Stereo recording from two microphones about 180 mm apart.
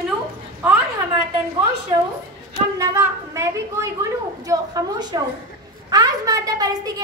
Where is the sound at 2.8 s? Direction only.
15° right (ahead or behind).